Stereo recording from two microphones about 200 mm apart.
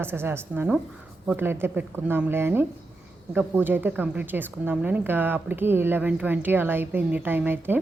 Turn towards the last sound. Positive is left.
turn(degrees=-10)  # may be behind; listen again after turning